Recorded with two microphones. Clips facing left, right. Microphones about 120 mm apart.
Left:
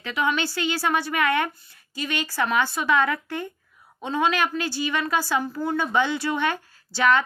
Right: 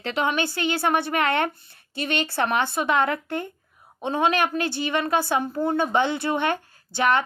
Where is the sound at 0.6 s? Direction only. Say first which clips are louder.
Right 2 dB; 55° right (ahead or behind).